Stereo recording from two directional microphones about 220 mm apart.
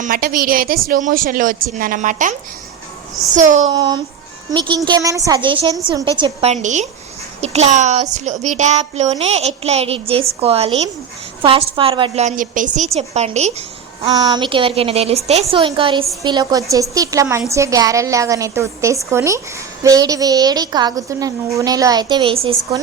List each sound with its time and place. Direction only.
0.0 s a woman's voice: 40° right (ahead or behind)
3.3 s a woman's voice: 35° right (ahead or behind)
3.7 s a woman's voice: 20° right (ahead or behind)